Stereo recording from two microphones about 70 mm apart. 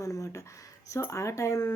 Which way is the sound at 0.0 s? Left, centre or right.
Left.